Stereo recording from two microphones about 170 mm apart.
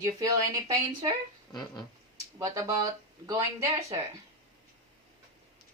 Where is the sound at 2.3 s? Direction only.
20° right (ahead or behind).